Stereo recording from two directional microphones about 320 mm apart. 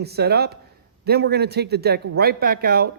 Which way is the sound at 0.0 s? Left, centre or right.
Right.